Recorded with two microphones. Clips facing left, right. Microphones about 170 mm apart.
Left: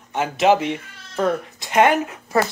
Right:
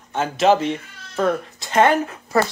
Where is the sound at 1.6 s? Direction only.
15° left (ahead or behind).